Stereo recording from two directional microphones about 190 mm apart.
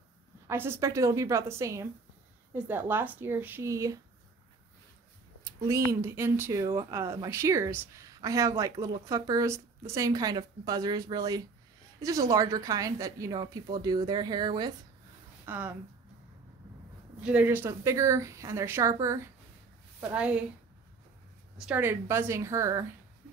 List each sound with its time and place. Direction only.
0.5 s speech: 15° right (ahead or behind)
5.9 s a woman's voice: 15° right (ahead or behind)
15.4 s a woman's voice: 10° right (ahead or behind)
17.2 s speech: 5° right (ahead or behind)
21.6 s speech: 10° right (ahead or behind)